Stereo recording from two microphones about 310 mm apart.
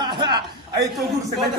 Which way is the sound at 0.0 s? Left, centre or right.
Centre.